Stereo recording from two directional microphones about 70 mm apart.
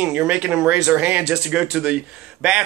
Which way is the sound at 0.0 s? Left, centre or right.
Centre.